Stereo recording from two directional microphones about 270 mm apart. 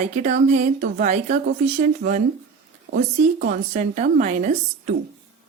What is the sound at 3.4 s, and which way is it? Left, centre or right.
A woman's voice, right.